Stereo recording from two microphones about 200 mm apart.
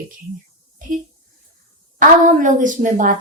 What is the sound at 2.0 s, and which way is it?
A woman's voice, 40° right (ahead or behind).